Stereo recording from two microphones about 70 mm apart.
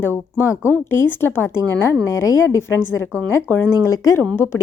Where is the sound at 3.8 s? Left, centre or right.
Left.